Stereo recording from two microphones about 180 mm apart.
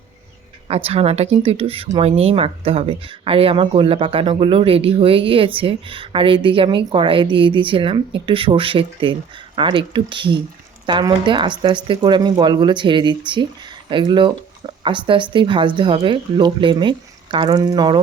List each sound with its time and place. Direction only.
0.9 s speech: 35° right (ahead or behind)